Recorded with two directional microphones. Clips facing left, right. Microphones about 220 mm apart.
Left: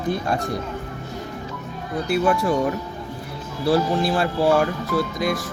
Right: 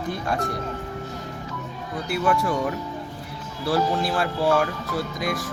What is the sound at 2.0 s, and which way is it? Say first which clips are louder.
Speech: left 3 dB; 25° left (ahead or behind).